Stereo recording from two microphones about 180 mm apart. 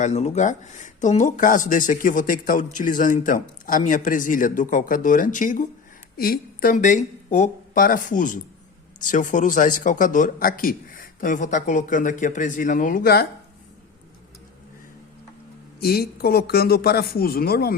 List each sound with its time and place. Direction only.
0.0 s speech: 40° left (ahead or behind); by 13.2 s 55° left (ahead or behind)
15.8 s speech: 60° left (ahead or behind)